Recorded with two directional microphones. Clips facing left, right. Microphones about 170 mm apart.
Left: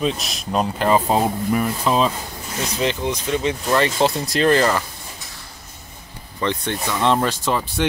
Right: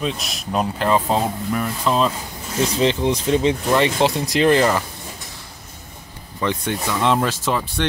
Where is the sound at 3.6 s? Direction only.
20° right (ahead or behind).